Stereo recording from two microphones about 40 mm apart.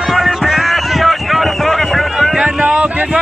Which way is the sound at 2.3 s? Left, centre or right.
Right.